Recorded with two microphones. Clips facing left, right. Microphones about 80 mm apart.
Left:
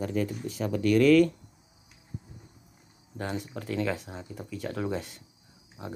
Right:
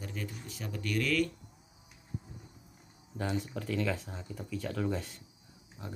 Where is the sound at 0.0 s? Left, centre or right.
Left.